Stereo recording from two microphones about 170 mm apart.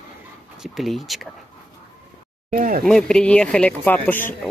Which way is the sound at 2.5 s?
50° right (ahead or behind).